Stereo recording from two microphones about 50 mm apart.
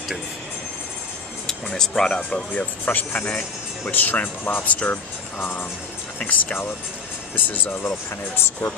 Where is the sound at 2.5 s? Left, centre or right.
Left.